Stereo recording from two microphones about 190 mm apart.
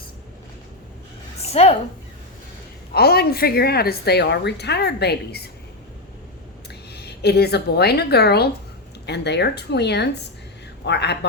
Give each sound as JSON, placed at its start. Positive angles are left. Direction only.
{"t": 1.4, "sound": "a sound", "side_deg": 35}
{"t": 2.9, "sound": "a woman's voice", "side_deg": 55}
{"t": 6.9, "sound": "a woman's voice", "side_deg": 60}